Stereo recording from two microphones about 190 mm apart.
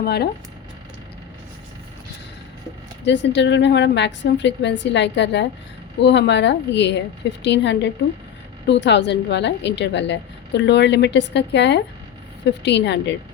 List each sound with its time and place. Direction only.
0.0 s speech: 60° left (ahead or behind)
3.0 s a woman's voice: 70° left (ahead or behind)